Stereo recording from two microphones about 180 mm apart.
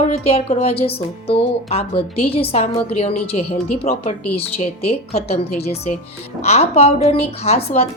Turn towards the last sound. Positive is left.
turn(degrees=35)  # may be behind; listen again after turning